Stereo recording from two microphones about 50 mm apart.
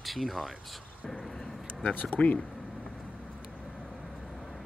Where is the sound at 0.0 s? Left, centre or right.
Centre.